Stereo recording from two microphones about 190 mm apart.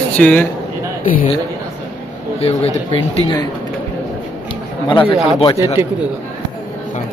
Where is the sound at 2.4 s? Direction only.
30° left (ahead or behind).